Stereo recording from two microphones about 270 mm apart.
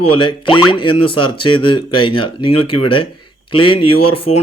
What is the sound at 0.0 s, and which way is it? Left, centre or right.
Speech, centre.